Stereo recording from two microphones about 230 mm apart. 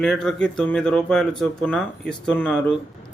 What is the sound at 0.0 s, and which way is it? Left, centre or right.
Speech, centre.